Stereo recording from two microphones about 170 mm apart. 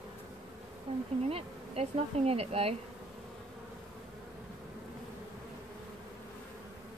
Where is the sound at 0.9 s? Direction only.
35° right (ahead or behind).